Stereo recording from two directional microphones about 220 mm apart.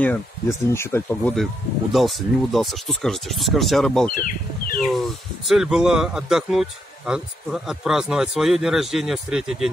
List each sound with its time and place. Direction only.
0.0 s speech: 10° left (ahead or behind)
4.1 s bird: 40° left (ahead or behind)
4.8 s speech: centre (ahead or behind)